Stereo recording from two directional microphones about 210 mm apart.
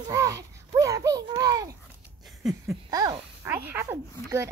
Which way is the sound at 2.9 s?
15° right (ahead or behind).